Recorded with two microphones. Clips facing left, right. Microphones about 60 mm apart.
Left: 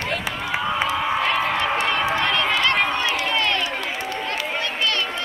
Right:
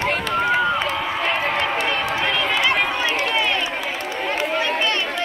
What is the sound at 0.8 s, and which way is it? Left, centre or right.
Crowd, centre.